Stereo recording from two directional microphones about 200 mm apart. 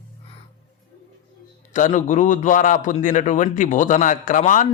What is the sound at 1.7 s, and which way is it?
A man's voice, 40° left (ahead or behind).